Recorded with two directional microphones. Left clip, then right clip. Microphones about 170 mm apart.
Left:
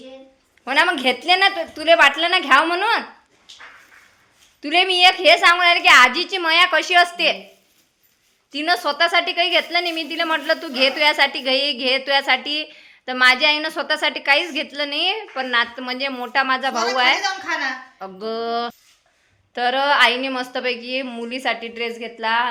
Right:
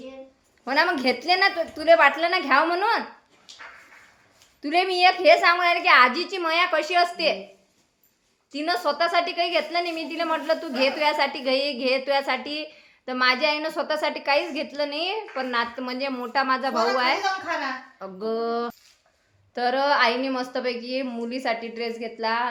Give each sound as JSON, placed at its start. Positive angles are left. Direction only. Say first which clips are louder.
{"t": 0.6, "sound": "a woman's voice", "louder": "left 4 dB", "side_deg": -5}
{"t": 4.6, "sound": "a woman's voice", "louder": "left 5 dB", "side_deg": -5}
{"t": 8.5, "sound": "a woman's voice", "louder": "left 5 dB", "side_deg": 5}